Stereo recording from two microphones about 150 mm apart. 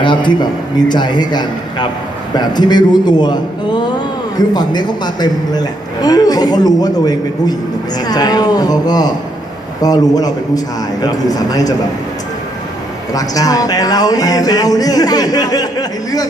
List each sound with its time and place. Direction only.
0.0 s a man's voice: 30° left (ahead or behind)
13.1 s a man's voice: 25° left (ahead or behind)